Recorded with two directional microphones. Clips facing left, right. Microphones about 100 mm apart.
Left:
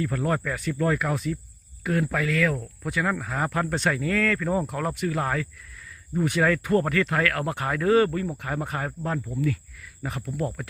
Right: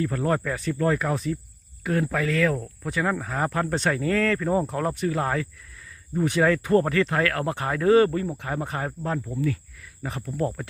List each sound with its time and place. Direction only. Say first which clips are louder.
0.0 s speech: right 2 dB; 30° right (ahead or behind)